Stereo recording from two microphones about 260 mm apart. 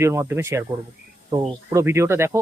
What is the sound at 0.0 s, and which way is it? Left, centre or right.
Speech, centre.